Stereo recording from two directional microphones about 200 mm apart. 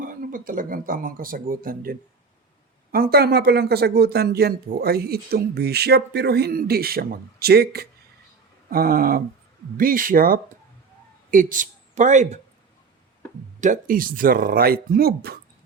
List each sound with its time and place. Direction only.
0.0 s a man's voice: 40° right (ahead or behind)
13.6 s speech: 40° right (ahead or behind)